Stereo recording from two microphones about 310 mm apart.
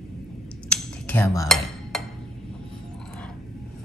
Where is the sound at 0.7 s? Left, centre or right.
Centre.